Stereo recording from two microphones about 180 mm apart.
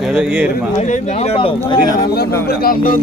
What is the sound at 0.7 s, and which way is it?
Speech, 40° left (ahead or behind).